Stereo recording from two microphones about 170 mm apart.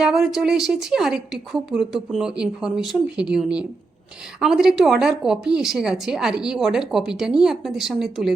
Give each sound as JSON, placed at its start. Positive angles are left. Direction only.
{"t": 0.0, "sound": "a woman's voice", "side_deg": 0}